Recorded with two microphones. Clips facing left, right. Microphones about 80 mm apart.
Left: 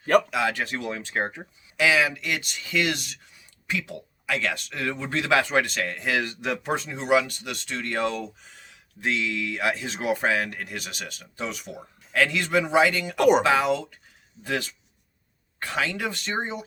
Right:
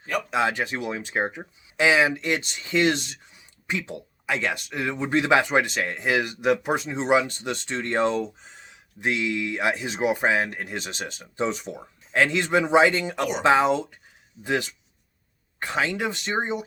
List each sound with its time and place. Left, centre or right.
0.3 s speech: right